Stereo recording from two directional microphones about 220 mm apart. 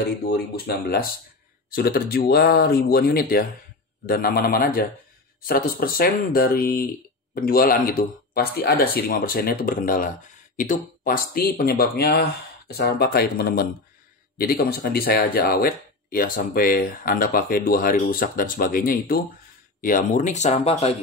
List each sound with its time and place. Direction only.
0.3 s speech: 45° left (ahead or behind); by 20.9 s 30° left (ahead or behind)